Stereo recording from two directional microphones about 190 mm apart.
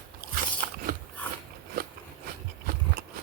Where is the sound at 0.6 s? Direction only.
55° right (ahead or behind).